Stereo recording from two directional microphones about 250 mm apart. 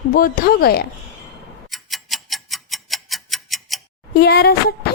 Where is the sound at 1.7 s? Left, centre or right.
Centre.